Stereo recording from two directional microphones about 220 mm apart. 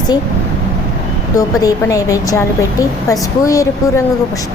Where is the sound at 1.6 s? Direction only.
15° left (ahead or behind).